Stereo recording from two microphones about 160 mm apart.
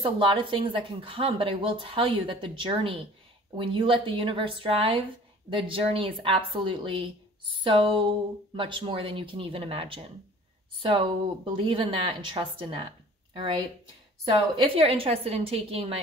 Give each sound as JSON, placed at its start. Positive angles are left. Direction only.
{"t": 0.0, "sound": "speech", "side_deg": -30}
{"t": 14.6, "sound": "speech", "side_deg": -35}